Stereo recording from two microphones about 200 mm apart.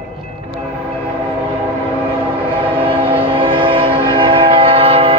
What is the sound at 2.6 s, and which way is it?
Train, 25° right (ahead or behind).